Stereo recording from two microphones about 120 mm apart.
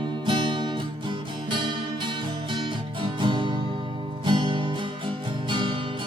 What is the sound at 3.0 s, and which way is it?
Music, 45° right (ahead or behind).